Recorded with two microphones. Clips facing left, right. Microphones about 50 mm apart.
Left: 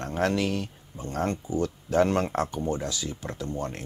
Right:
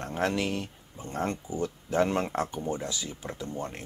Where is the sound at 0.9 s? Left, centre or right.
Centre.